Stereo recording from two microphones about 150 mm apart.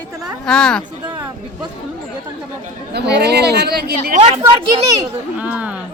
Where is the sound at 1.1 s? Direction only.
30° right (ahead or behind).